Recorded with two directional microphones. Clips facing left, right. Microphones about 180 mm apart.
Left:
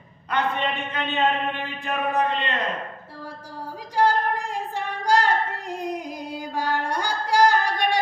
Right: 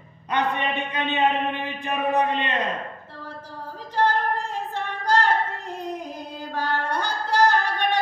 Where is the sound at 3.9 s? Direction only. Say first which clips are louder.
Left 1 dB; 10° left (ahead or behind).